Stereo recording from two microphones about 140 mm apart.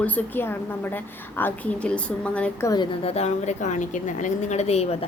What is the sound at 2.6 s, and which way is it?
Speech, 30° left (ahead or behind).